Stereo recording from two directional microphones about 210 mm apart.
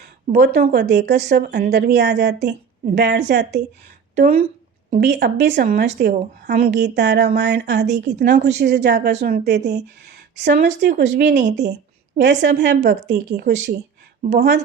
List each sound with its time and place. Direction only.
0.0 s a woman's voice: 50° right (ahead or behind)
10.5 s speech: 35° right (ahead or behind)
10.8 s a woman's voice: 50° right (ahead or behind)